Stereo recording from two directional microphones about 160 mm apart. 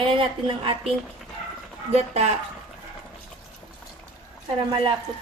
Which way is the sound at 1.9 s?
45° right (ahead or behind).